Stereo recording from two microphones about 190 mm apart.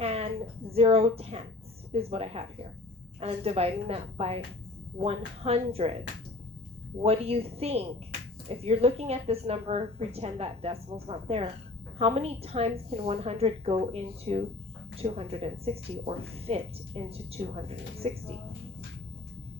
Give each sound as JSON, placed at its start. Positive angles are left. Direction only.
{"t": 0.0, "sound": "a sound", "side_deg": -30}
{"t": 0.7, "sound": "a woman's voice", "side_deg": -30}
{"t": 7.0, "sound": "a woman's voice", "side_deg": -30}